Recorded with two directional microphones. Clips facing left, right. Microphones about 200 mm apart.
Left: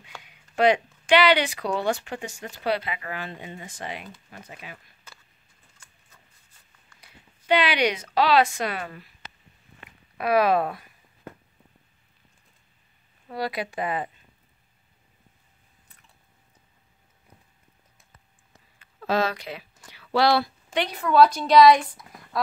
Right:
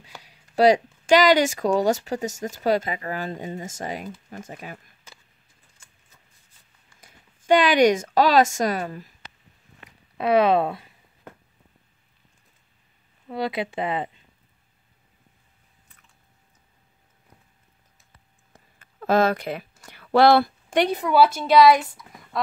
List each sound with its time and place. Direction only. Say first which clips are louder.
0.2 s speech: right 4 dB; 35° right (ahead or behind)
7.0 s speech: even; 45° right (ahead or behind)
10.1 s speech: right 2 dB; 25° right (ahead or behind)
13.3 s speech: right 3 dB; 20° right (ahead or behind)
18.8 s speech: right 5 dB; 50° right (ahead or behind)
19.9 s a sound: right 5 dB; 50° right (ahead or behind)
20.9 s a woman's voice: left 3 dB; 10° right (ahead or behind)
22.1 s a sound: even; centre (ahead or behind)